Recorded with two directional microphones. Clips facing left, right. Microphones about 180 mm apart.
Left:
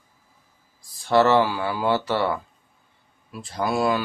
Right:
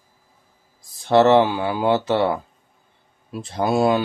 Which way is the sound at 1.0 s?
20° right (ahead or behind).